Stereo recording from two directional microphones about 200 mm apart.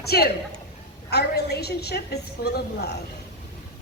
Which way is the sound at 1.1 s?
55° left (ahead or behind).